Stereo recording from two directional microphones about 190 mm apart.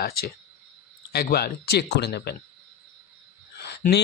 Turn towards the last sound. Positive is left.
turn(degrees=60)  # may be behind; listen again after turning